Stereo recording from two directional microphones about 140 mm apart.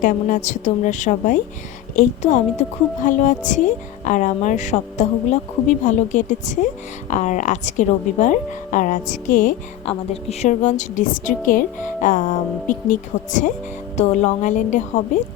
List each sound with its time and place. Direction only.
0.0 s a woman's voice: 60° left (ahead or behind)
9.8 s a woman's voice: 50° left (ahead or behind)